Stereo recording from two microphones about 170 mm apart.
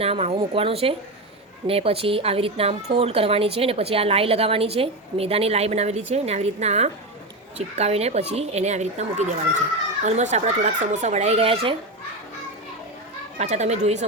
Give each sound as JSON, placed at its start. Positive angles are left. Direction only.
{"t": 0.0, "sound": "a woman's voice", "side_deg": -35}
{"t": 13.4, "sound": "a woman's voice", "side_deg": -40}